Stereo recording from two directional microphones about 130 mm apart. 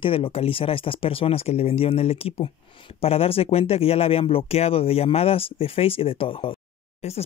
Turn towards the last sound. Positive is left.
turn(degrees=55)  # may be behind; listen again after turning